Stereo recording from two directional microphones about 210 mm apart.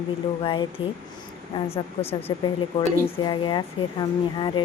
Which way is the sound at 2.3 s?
20° left (ahead or behind).